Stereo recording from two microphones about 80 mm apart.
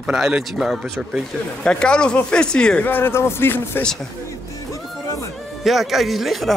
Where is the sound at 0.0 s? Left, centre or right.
Centre.